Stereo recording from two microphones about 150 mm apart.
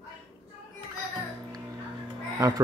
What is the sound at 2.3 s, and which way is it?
Speech, 25° right (ahead or behind).